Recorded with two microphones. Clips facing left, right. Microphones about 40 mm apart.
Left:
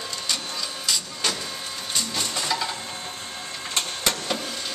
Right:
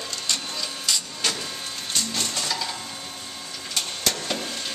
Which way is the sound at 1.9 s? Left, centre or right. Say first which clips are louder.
Even; centre.